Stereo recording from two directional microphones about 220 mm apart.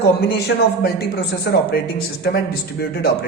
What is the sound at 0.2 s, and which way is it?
Speech, 45° left (ahead or behind).